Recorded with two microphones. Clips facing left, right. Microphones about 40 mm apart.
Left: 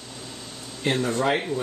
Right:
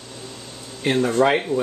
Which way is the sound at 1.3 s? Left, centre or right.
Centre.